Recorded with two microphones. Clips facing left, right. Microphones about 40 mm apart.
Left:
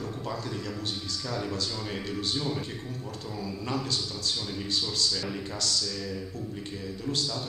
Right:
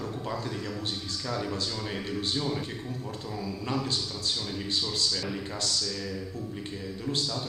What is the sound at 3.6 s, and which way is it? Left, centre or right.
Speech, centre.